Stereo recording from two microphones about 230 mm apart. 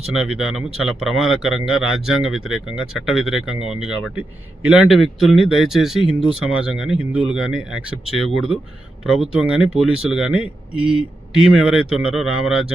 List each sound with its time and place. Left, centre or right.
0.1 s speech: centre